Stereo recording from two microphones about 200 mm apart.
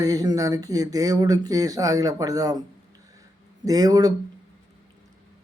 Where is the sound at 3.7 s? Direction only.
20° right (ahead or behind).